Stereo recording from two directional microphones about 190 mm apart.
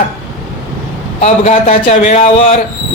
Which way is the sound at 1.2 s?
35° left (ahead or behind).